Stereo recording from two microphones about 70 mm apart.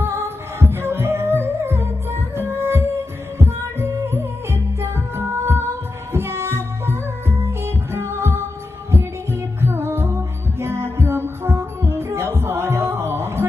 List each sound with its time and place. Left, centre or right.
0.0 s music: right